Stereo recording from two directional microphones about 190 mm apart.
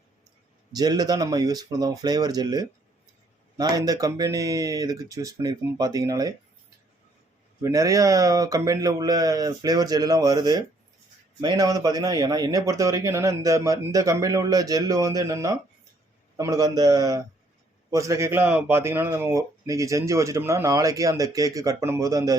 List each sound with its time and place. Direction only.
0.7 s speech: 20° right (ahead or behind)
7.6 s speech: 15° right (ahead or behind)